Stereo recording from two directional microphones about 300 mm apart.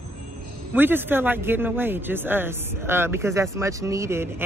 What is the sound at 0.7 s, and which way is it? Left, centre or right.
Speech, centre.